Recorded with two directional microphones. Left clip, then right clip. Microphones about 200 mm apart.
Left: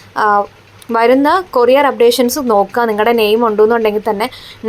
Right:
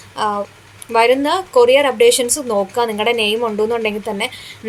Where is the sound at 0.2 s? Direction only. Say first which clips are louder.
Left 8 dB; 30° left (ahead or behind).